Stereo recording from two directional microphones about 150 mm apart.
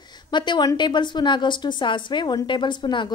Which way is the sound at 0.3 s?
30° left (ahead or behind).